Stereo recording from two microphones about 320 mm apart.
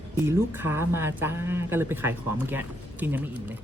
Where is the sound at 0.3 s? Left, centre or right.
Centre.